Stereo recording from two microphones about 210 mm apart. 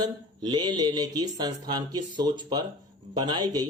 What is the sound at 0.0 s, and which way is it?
Speech, 20° right (ahead or behind).